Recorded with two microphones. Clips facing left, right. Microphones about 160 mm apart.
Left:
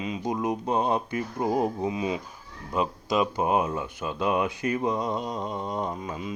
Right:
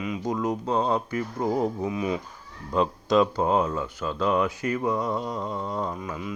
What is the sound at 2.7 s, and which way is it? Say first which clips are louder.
Speech: right 4 dB; 10° left (ahead or behind).